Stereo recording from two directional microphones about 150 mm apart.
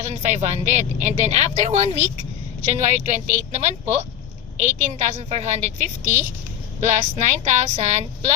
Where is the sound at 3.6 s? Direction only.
50° right (ahead or behind).